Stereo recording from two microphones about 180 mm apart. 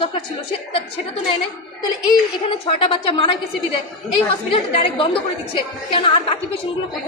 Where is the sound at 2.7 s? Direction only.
30° left (ahead or behind).